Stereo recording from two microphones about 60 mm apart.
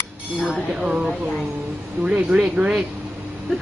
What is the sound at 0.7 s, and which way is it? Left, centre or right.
Speech, centre.